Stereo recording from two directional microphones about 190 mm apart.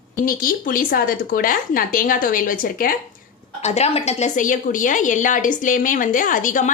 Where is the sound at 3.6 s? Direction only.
35° left (ahead or behind).